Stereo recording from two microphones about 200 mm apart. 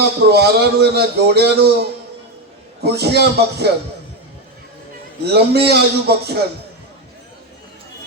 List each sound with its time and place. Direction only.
0.3 s a man's voice: 55° right (ahead or behind)
5.2 s a man's voice: 55° right (ahead or behind)